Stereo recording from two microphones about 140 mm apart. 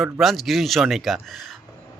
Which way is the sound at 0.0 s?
Centre (ahead or behind).